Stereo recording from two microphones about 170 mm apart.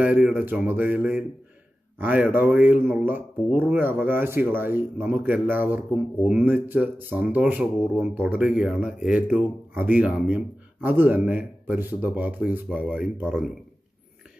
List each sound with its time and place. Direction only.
0.0 s speech: 5° right (ahead or behind)